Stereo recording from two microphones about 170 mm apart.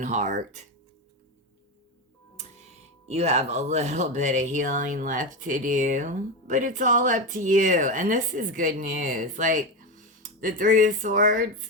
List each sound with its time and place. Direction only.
0.0 s speech: 45° right (ahead or behind)
3.1 s speech: 40° right (ahead or behind)